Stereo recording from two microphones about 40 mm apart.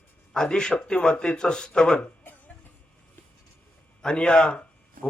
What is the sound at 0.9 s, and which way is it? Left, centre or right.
Speech, left.